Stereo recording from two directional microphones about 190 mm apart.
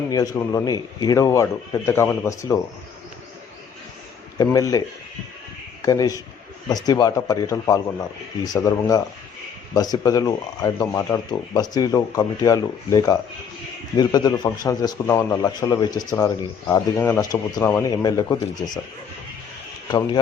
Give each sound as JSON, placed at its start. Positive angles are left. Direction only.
{"t": 0.1, "sound": "speech", "side_deg": 20}
{"t": 4.4, "sound": "a man's voice", "side_deg": 20}
{"t": 5.8, "sound": "a man's voice", "side_deg": 20}